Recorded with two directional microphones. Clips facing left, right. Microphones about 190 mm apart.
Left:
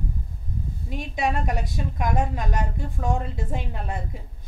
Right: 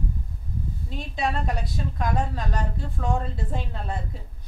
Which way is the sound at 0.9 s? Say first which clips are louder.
Left 2 dB; 15° left (ahead or behind).